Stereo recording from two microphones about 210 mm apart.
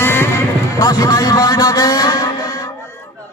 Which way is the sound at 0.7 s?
15° left (ahead or behind).